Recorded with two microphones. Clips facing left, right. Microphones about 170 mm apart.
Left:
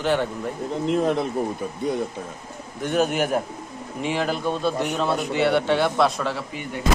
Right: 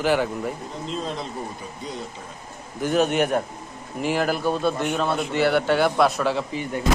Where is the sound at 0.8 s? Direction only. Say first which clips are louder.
Left 9 dB; 65° left (ahead or behind).